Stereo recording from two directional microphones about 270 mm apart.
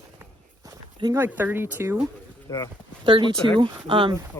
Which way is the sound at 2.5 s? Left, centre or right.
Centre.